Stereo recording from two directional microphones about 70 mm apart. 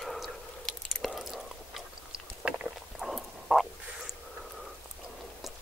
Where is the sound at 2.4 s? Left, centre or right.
Centre.